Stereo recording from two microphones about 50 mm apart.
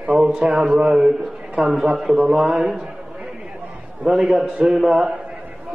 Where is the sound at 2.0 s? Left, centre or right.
Centre.